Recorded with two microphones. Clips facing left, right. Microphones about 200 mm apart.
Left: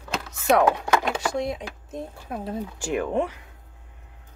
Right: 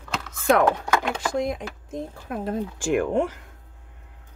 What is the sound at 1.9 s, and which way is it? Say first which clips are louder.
Speech: right 2 dB; 75° right (ahead or behind).